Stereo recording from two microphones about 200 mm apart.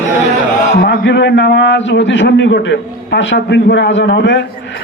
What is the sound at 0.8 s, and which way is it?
A man's voice, 60° left (ahead or behind).